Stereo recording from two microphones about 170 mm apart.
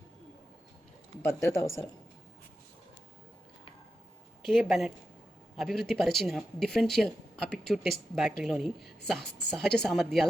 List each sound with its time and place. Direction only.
1.2 s speech: 15° left (ahead or behind)
4.4 s speech: centre (ahead or behind)